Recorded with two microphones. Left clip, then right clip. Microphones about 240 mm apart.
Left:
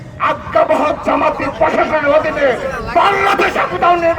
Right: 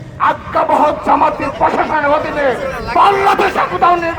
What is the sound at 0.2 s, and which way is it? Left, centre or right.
Speech, right.